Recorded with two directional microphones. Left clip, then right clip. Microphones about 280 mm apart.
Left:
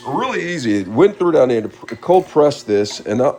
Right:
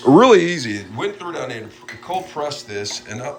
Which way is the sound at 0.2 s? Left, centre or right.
Centre.